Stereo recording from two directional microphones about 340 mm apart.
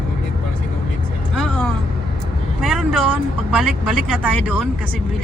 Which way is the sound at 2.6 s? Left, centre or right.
Centre.